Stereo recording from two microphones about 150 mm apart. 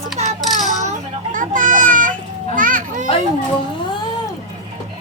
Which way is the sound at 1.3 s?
60° right (ahead or behind).